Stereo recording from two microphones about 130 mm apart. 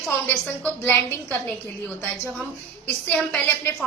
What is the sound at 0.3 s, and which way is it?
A woman's voice, 15° left (ahead or behind).